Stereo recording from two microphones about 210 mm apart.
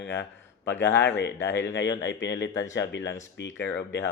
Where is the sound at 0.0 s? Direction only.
60° left (ahead or behind).